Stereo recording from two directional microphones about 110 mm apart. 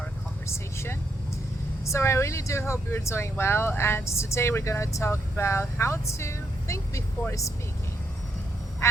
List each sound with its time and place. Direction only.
0.4 s vehicle: 25° left (ahead or behind)
1.8 s speech: 25° left (ahead or behind)